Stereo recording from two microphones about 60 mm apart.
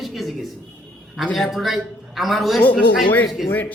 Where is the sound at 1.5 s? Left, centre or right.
Centre.